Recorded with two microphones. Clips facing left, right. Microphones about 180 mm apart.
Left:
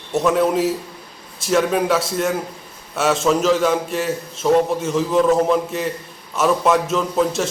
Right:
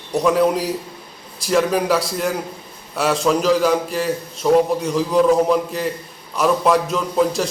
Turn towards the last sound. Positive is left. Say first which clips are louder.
# right 1 dB
turn(degrees=0)  # may be behind; listen again after turning